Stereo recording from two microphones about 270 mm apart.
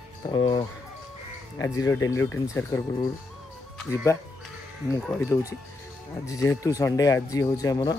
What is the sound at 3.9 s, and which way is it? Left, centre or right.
Speech, centre.